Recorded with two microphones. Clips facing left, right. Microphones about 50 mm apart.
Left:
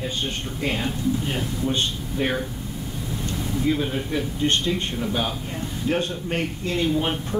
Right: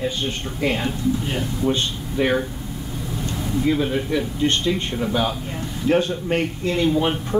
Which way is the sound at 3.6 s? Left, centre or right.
Centre.